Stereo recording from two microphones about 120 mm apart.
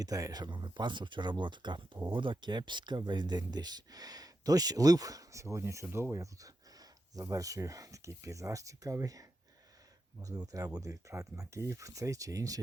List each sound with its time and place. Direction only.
0.0 s speech: 30° right (ahead or behind)